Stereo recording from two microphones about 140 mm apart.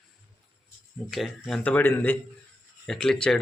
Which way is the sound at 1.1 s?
Centre (ahead or behind).